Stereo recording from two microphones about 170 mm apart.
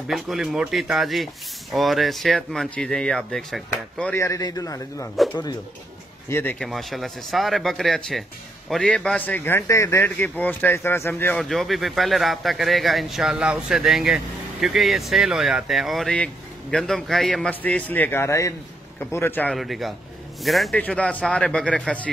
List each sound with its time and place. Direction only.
0.1 s a man's voice: centre (ahead or behind)
4.2 s a man's voice: 20° left (ahead or behind)
5.1 s a man's voice: centre (ahead or behind)
6.2 s speech: 15° left (ahead or behind)
6.6 s a man's voice: centre (ahead or behind)
11.4 s a man's voice: centre (ahead or behind)
19.5 s a man's voice: centre (ahead or behind)